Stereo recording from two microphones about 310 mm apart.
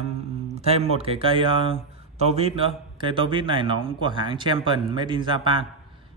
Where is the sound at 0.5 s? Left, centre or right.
Centre.